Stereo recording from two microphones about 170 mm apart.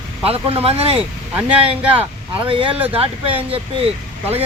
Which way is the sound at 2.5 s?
30° right (ahead or behind).